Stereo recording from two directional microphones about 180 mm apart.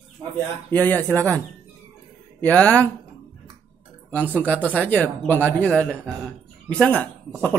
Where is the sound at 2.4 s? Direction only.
5° left (ahead or behind).